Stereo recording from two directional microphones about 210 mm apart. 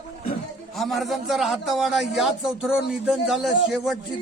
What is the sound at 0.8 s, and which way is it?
A man's voice, centre (ahead or behind).